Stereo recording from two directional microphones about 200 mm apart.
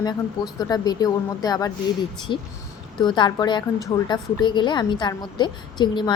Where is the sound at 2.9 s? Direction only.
25° left (ahead or behind).